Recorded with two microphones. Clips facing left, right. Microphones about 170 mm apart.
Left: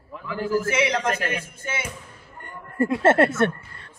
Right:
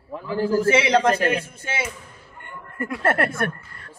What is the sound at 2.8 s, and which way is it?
A woman's voice, 25° left (ahead or behind).